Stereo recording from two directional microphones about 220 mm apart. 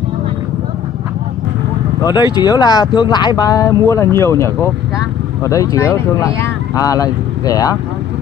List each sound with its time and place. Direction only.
2.0 s speech: 20° left (ahead or behind)